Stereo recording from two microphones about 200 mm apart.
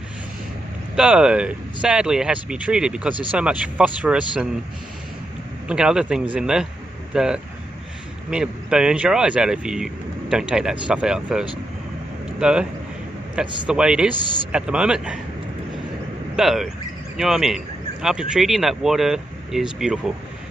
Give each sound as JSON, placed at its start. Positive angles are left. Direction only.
{"t": 0.9, "sound": "speech", "side_deg": -5}
{"t": 5.7, "sound": "speech", "side_deg": -5}
{"t": 13.7, "sound": "speech", "side_deg": -5}
{"t": 16.3, "sound": "speech", "side_deg": 0}